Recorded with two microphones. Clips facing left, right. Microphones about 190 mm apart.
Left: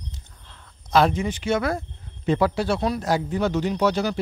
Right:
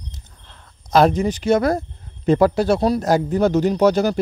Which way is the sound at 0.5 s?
45° right (ahead or behind).